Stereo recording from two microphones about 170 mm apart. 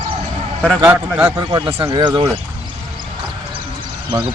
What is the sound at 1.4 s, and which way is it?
Speech, 25° right (ahead or behind).